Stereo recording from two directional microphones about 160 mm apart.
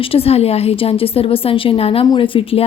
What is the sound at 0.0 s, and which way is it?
Speech, 35° left (ahead or behind).